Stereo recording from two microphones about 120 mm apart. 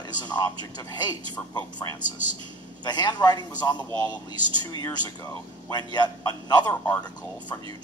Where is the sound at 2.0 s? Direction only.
90° left.